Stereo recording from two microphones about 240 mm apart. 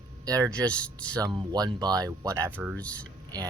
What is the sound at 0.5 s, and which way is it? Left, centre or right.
Speech, centre.